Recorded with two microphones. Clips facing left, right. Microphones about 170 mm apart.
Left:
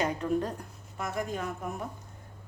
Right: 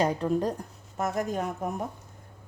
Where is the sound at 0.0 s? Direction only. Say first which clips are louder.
Right 3 dB; 35° right (ahead or behind).